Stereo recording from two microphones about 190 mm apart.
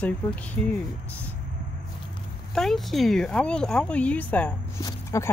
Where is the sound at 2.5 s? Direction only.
Centre (ahead or behind).